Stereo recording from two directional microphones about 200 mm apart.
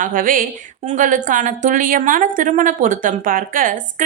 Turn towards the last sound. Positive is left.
turn(degrees=-40)  # may be behind; listen again after turning